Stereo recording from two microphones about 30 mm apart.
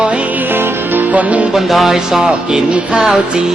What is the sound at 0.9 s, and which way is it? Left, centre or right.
Music, right.